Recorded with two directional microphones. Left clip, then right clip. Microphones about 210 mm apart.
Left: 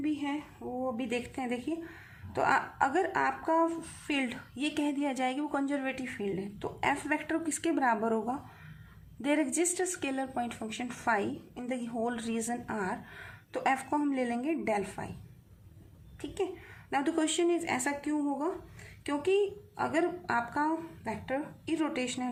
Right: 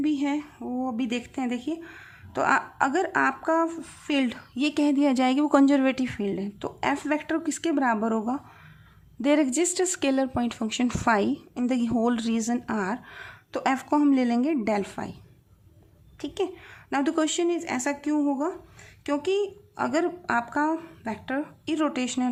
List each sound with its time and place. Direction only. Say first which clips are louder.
0.0 s a sound: right 7 dB; 45° right (ahead or behind)
0.9 s speech: right 4 dB; 35° right (ahead or behind)
16.2 s speech: right 5 dB; 35° right (ahead or behind)